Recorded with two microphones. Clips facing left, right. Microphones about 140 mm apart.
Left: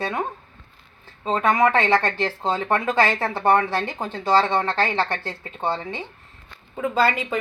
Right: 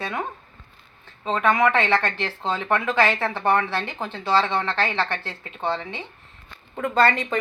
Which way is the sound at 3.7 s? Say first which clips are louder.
Left 2 dB; 40° left (ahead or behind).